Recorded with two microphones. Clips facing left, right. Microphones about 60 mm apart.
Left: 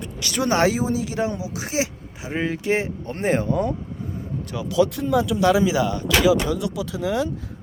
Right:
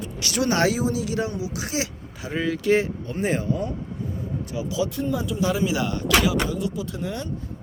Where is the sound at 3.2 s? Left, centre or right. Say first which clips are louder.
Left 3 dB; left.